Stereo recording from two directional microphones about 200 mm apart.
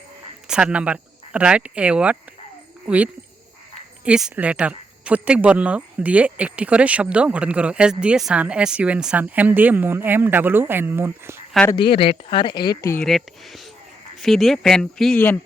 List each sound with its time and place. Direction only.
0.4 s speech: 5° right (ahead or behind)
11.5 s speech: 10° left (ahead or behind)
11.8 s speech: 25° left (ahead or behind)
13.1 s speech: centre (ahead or behind)